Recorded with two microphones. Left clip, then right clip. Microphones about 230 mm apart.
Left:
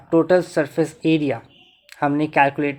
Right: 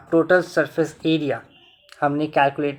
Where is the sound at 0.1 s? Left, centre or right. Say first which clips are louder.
Left 1 dB; left.